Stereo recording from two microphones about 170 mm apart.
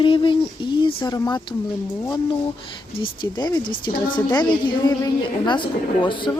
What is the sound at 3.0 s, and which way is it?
Speech, 25° left (ahead or behind).